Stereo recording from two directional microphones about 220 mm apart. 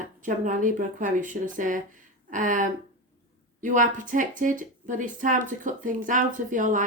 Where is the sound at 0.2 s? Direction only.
35° right (ahead or behind).